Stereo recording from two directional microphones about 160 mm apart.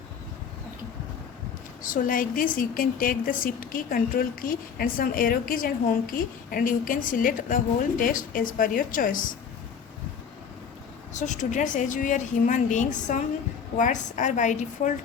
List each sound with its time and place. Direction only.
1.8 s a woman's voice: 55° left (ahead or behind)
11.1 s a woman's voice: 50° left (ahead or behind)